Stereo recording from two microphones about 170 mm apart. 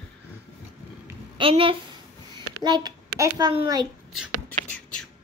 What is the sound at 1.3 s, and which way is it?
A woman's voice, 30° right (ahead or behind).